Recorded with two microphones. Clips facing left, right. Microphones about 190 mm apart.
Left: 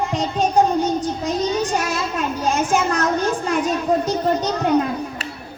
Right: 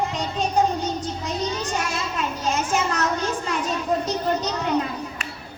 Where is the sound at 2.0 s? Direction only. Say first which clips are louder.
Left 4 dB; 55° left (ahead or behind).